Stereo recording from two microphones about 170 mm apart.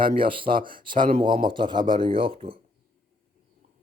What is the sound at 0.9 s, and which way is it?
Speech, 50° right (ahead or behind).